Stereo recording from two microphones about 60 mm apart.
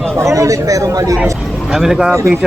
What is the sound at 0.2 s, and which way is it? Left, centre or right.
Speech, right.